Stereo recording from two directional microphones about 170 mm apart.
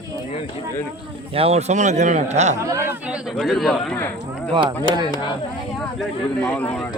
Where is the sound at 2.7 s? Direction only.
15° right (ahead or behind).